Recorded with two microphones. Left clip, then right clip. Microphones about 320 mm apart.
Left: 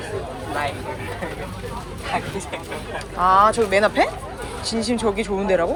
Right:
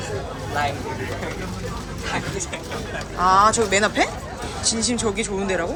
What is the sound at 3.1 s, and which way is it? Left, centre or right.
Speech, centre.